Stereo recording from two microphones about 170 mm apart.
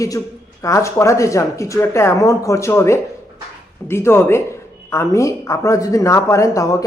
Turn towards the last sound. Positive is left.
turn(degrees=20)  # may be behind; listen again after turning